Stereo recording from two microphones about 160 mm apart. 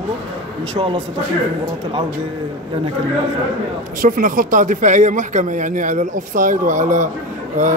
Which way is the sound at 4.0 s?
60° right (ahead or behind).